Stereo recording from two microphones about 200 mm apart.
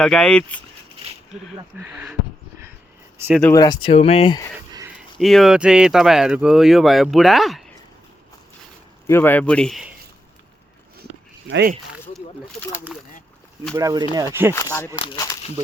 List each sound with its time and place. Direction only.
0.0 s speech: 5° left (ahead or behind)
1.8 s speech: 10° right (ahead or behind)
3.4 s speech: 15° left (ahead or behind)
5.1 s speech: centre (ahead or behind)
9.0 s speech: 10° left (ahead or behind)
11.4 s speech: 60° right (ahead or behind)
12.7 s speech: 10° right (ahead or behind)
14.5 s speech: 15° left (ahead or behind)